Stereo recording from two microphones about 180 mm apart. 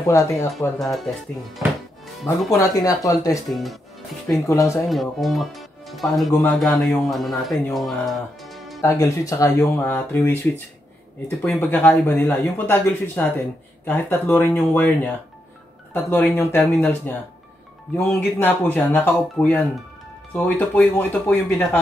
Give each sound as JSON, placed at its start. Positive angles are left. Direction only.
{"t": 0.0, "sound": "speech", "side_deg": 20}
{"t": 2.5, "sound": "speech", "side_deg": 20}
{"t": 3.4, "sound": "speech", "side_deg": 0}
{"t": 4.5, "sound": "speech", "side_deg": 15}
{"t": 4.8, "sound": "speech", "side_deg": 0}
{"t": 8.8, "sound": "speech", "side_deg": 15}